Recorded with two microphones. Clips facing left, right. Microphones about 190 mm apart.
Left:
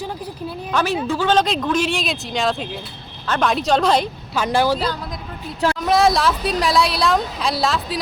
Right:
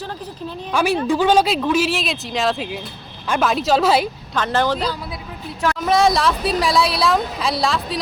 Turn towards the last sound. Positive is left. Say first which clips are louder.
# even
turn(degrees=0)  # may be behind; listen again after turning